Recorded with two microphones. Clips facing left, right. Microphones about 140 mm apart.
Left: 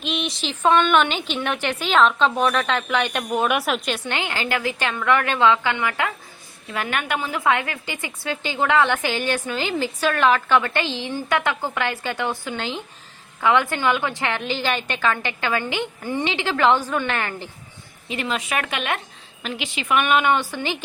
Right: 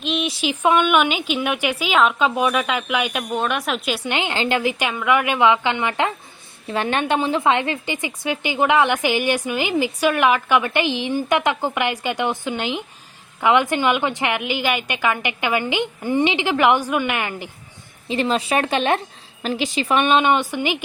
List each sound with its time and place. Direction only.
0.0 s a woman's voice: centre (ahead or behind)
18.1 s a woman's voice: 30° right (ahead or behind); by 20.7 s 15° right (ahead or behind)